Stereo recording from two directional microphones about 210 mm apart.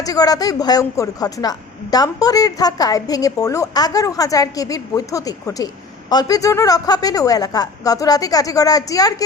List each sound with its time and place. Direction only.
0.0 s speech: 15° left (ahead or behind)